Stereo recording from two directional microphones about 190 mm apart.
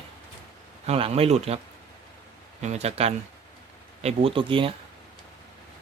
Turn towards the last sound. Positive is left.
turn(degrees=-25)  # may be behind; listen again after turning